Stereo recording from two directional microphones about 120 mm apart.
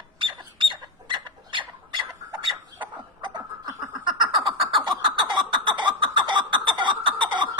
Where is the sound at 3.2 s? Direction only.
40° right (ahead or behind).